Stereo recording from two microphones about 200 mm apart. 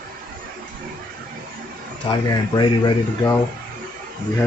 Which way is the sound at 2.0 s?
20° left (ahead or behind).